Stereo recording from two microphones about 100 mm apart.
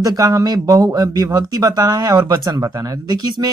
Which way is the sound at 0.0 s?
35° right (ahead or behind).